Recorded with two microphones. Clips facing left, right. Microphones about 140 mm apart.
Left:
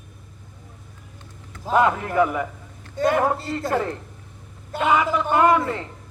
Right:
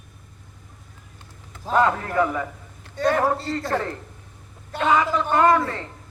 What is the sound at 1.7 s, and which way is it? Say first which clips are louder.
A man's voice: left 1 dB; 15° left (ahead or behind).